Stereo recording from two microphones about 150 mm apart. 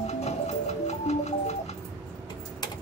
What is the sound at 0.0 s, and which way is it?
Music, 45° left (ahead or behind).